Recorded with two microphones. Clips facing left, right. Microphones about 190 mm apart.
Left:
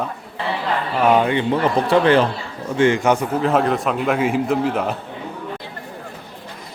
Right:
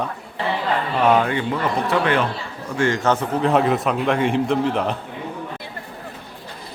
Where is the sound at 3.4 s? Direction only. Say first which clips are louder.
Right 1 dB; centre (ahead or behind).